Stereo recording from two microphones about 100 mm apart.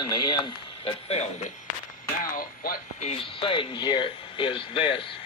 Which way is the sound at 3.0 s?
70° left (ahead or behind).